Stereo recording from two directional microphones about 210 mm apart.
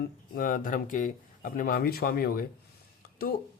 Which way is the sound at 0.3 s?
40° left (ahead or behind).